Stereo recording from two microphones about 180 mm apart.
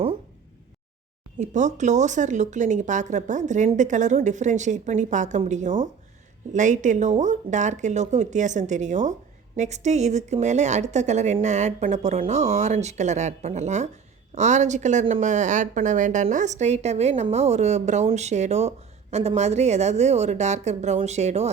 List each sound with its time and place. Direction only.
1.4 s speech: 40° right (ahead or behind)